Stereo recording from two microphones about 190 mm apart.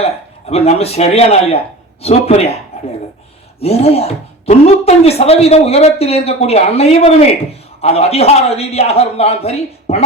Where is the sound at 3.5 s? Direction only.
30° left (ahead or behind).